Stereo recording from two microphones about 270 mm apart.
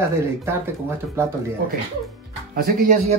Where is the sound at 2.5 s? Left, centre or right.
Right.